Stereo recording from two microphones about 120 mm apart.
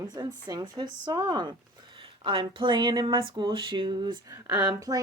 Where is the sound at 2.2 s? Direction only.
45° right (ahead or behind).